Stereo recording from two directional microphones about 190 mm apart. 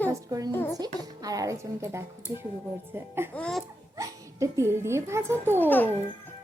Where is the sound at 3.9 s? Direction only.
15° right (ahead or behind).